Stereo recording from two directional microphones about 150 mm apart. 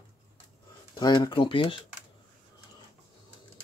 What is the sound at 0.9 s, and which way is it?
Speech, 30° left (ahead or behind).